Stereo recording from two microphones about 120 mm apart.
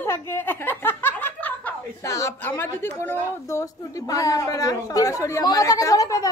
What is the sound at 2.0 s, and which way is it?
A woman's voice, 30° left (ahead or behind).